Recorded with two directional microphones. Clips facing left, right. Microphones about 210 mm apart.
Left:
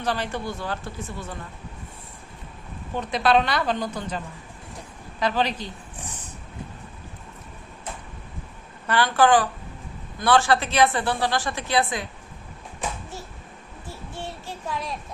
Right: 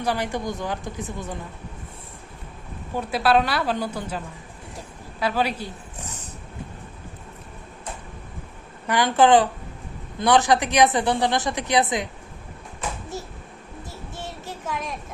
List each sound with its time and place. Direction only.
0.0 s speech: 10° right (ahead or behind)
2.9 s speech: 10° right (ahead or behind)
5.2 s a woman's voice: 10° right (ahead or behind)
8.9 s a woman's voice: 20° right (ahead or behind)